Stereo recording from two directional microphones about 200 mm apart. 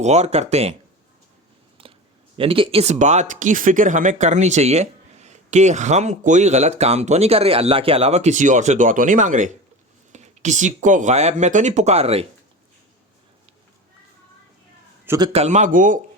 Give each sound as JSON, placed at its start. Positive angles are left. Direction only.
{"t": 0.0, "sound": "speech", "side_deg": -35}
{"t": 1.8, "sound": "a sound", "side_deg": -25}
{"t": 2.4, "sound": "speech", "side_deg": -25}
{"t": 15.0, "sound": "a man's voice", "side_deg": -15}
{"t": 15.3, "sound": "speech", "side_deg": -35}